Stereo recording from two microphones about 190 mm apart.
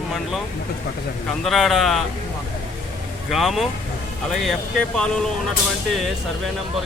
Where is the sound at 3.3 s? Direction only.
Centre (ahead or behind).